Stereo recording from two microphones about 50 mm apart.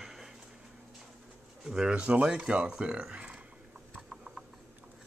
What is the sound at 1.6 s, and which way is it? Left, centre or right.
Speech, centre.